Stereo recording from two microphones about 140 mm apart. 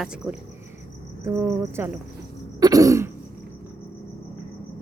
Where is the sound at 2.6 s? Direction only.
25° right (ahead or behind).